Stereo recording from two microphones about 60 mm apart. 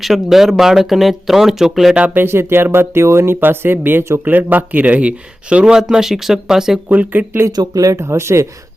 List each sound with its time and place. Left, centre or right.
0.0 s speech: centre
2.1 s speech: right
5.6 s speech: centre
6.8 s speech: right
7.5 s speech: right